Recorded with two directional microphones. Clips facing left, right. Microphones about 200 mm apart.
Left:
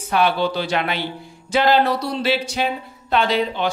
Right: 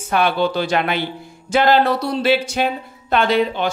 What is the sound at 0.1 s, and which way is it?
Speech, 50° right (ahead or behind).